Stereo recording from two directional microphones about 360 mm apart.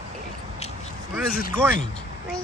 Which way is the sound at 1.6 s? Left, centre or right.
Centre.